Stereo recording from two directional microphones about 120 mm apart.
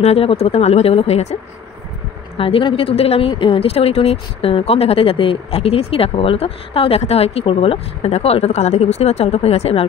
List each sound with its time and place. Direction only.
0.0 s speech: 55° left (ahead or behind)
2.3 s speech: 50° left (ahead or behind)